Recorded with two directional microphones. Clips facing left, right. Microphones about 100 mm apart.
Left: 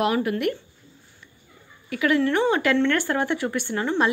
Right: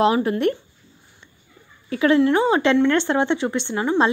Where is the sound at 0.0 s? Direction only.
30° right (ahead or behind).